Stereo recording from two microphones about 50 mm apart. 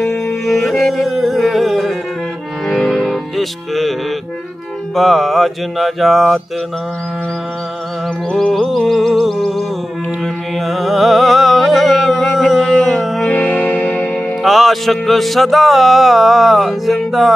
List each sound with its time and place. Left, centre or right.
0.0 s music: left
0.5 s music: centre
4.9 s music: centre
8.6 s music: centre
13.2 s music: left
14.4 s music: centre